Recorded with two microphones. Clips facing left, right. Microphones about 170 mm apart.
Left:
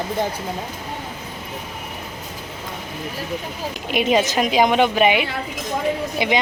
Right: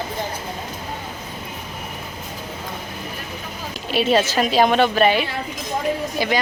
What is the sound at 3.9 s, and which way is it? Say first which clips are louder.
A woman's voice: even; 15° left (ahead or behind).